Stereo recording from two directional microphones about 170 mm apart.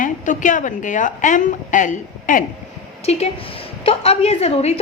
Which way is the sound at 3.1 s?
35° left (ahead or behind).